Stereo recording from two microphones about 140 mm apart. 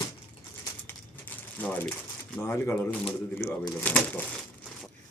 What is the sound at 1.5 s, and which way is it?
Speech, 10° left (ahead or behind).